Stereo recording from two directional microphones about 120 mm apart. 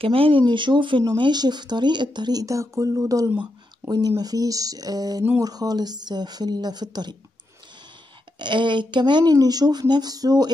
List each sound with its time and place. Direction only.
0.0 s speech: 50° right (ahead or behind); by 3.3 s 30° right (ahead or behind)
3.3 s a sound: 15° right (ahead or behind)
4.2 s speech: 30° right (ahead or behind)
8.4 s speech: 40° right (ahead or behind)